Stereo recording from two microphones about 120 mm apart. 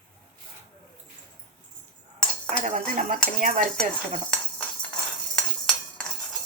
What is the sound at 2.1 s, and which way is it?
Cutlery, 10° left (ahead or behind).